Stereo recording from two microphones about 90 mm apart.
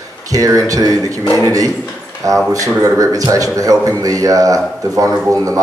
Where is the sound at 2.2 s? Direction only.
40° right (ahead or behind).